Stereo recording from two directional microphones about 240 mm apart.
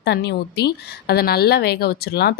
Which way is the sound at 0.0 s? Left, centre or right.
Left.